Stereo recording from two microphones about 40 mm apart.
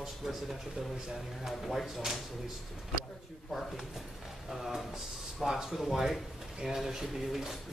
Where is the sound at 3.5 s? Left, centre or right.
Centre.